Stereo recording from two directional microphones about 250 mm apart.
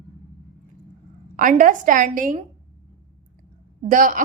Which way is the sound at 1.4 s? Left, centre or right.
Right.